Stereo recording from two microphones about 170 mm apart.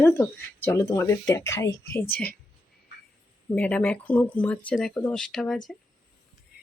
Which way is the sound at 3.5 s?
10° left (ahead or behind).